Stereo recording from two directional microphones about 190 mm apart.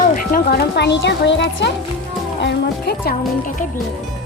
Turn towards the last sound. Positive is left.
turn(degrees=55)  # may be behind; listen again after turning